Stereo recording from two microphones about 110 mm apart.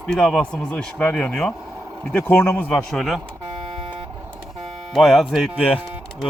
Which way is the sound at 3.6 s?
50° right (ahead or behind).